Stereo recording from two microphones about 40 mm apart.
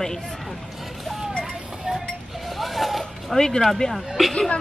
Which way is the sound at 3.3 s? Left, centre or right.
Centre.